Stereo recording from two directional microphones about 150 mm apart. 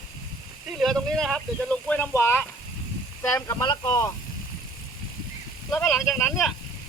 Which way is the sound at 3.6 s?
30° left (ahead or behind).